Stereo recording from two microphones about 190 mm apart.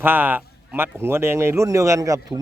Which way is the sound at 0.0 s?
10° right (ahead or behind).